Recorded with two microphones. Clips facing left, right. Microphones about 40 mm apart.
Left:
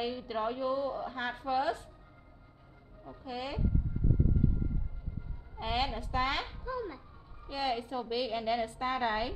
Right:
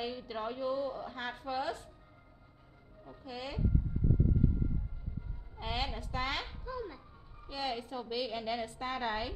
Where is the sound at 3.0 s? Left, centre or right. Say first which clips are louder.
Left 4 dB; centre.